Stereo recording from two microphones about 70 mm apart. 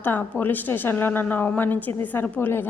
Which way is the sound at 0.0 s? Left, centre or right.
Left.